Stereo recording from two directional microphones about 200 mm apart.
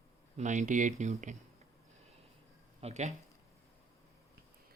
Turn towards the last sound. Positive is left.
turn(degrees=-35)  # may be behind; listen again after turning